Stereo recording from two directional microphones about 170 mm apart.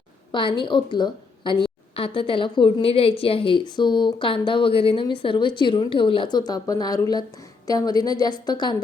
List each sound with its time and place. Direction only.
0.3 s a woman's voice: 30° left (ahead or behind)